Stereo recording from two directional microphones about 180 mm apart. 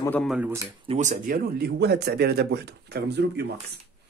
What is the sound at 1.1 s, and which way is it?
Speech, 55° right (ahead or behind).